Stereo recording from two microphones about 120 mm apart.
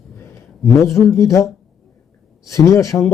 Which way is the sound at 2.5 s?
25° left (ahead or behind).